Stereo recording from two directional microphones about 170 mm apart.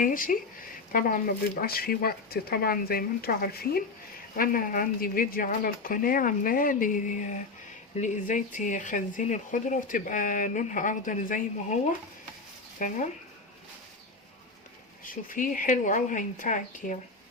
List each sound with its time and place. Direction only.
0.0 s speech: 55° left (ahead or behind)
15.0 s speech: 55° left (ahead or behind)